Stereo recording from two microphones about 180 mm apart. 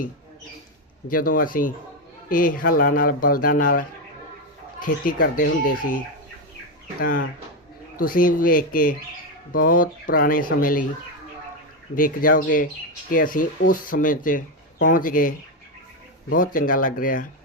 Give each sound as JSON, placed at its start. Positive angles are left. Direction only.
{"t": 1.0, "sound": "speech", "side_deg": 50}
{"t": 5.0, "sound": "speech", "side_deg": 70}
{"t": 5.6, "sound": "speech", "side_deg": 50}
{"t": 7.0, "sound": "speech", "side_deg": 55}
{"t": 11.9, "sound": "speech", "side_deg": 50}